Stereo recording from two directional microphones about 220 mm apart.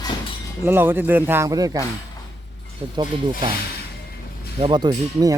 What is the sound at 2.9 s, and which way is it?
Speech, 25° right (ahead or behind).